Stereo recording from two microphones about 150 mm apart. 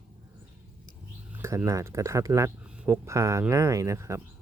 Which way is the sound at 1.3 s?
15° right (ahead or behind).